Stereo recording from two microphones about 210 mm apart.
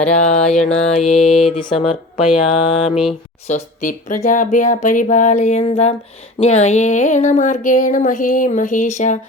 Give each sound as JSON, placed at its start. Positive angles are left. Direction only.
{"t": 0.1, "sound": "speech", "side_deg": 35}
{"t": 0.9, "sound": "a sound", "side_deg": 30}
{"t": 3.4, "sound": "speech", "side_deg": 35}